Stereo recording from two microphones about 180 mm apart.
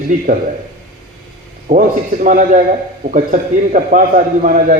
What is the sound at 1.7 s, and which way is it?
A man's voice, 45° right (ahead or behind).